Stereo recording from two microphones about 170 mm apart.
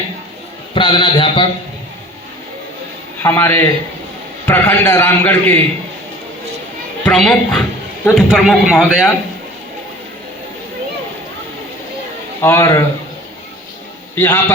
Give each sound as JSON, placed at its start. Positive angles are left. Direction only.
{"t": 0.7, "sound": "a man's voice", "side_deg": 30}
{"t": 3.2, "sound": "a man's voice", "side_deg": 10}
{"t": 7.0, "sound": "a child's voice", "side_deg": 5}
{"t": 12.4, "sound": "a man's voice", "side_deg": 15}
{"t": 14.2, "sound": "a man's voice", "side_deg": 15}